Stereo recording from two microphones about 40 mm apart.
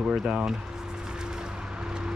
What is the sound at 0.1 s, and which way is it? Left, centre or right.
Speech, right.